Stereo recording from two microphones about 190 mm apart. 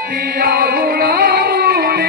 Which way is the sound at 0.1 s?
55° right (ahead or behind).